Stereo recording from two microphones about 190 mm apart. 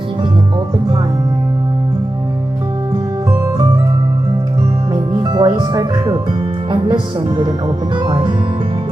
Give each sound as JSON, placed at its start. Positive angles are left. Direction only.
{"t": 5.2, "sound": "speech", "side_deg": -20}